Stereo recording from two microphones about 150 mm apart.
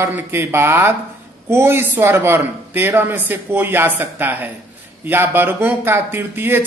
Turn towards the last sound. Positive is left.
turn(degrees=-15)  # may be behind; listen again after turning